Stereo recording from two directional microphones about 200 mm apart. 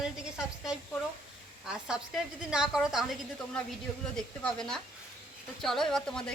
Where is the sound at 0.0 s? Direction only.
5° right (ahead or behind).